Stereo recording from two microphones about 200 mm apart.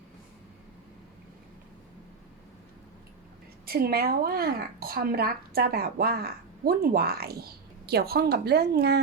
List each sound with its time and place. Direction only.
3.7 s speech: 50° right (ahead or behind)